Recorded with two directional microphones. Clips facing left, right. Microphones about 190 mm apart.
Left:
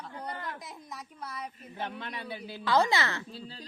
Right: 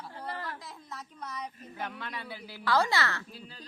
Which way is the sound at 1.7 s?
25° left (ahead or behind).